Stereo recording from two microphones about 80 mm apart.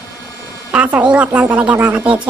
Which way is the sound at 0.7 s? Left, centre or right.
Centre.